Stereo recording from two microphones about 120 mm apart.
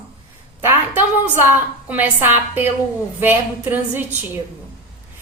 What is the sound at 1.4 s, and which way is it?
A woman's voice, 15° right (ahead or behind).